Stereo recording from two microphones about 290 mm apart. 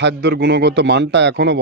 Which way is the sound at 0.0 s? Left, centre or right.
Right.